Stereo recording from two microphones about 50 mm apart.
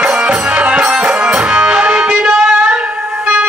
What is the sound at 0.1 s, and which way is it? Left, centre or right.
Music, centre.